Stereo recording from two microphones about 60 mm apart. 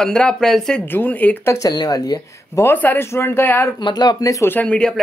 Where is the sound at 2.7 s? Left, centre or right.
Left.